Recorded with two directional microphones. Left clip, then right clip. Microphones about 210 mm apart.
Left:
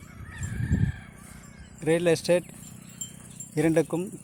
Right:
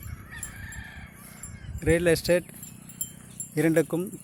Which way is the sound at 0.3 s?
50° right (ahead or behind).